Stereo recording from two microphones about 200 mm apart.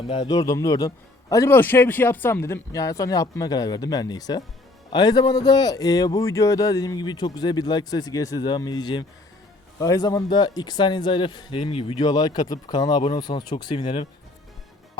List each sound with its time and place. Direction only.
0.1 s a man's voice: 20° left (ahead or behind)